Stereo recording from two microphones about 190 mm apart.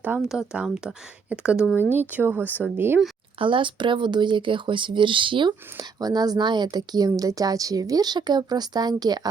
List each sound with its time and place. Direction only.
0.0 s speech: 5° right (ahead or behind)
3.3 s speech: 25° right (ahead or behind)